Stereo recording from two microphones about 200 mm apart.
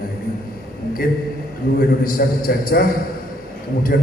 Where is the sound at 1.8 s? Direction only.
45° left (ahead or behind).